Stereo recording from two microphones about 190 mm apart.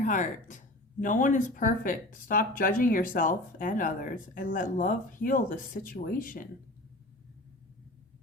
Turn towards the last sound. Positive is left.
turn(degrees=45)  # may be behind; listen again after turning